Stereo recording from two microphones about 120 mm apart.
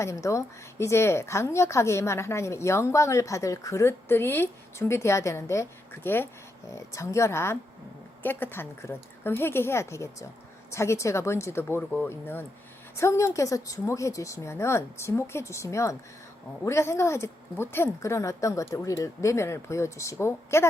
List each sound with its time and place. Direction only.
0.0 s a woman's voice: 25° left (ahead or behind)